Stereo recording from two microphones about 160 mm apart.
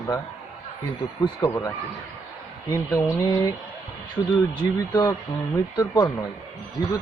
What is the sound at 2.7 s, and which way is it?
Speech, 20° left (ahead or behind).